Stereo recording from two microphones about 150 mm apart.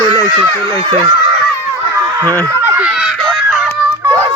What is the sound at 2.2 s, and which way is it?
Speech, 10° left (ahead or behind).